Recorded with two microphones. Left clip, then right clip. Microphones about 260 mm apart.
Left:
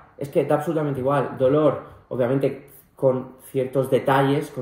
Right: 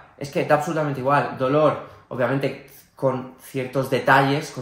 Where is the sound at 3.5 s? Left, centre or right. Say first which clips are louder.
Left 2 dB; right.